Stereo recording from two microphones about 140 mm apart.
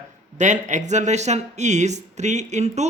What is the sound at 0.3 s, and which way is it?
Speech, 60° right (ahead or behind).